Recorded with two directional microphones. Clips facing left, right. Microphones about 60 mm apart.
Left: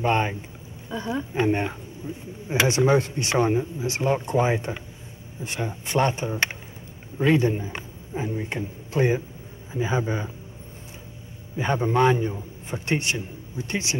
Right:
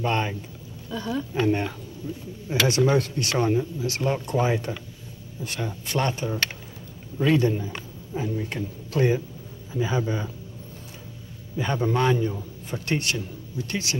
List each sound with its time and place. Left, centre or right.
0.0 s a man's voice: left
11.5 s speech: left